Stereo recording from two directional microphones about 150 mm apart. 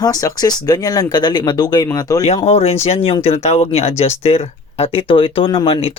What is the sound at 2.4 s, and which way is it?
Speech, 40° left (ahead or behind).